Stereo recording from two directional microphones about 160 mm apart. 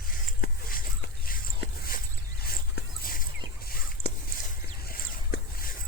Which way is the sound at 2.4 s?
70° left (ahead or behind).